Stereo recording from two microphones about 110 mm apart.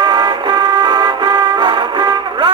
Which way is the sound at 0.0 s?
40° right (ahead or behind).